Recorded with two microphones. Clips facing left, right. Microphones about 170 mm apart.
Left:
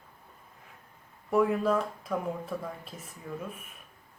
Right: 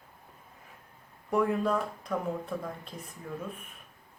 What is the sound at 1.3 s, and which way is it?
Speech, 5° left (ahead or behind).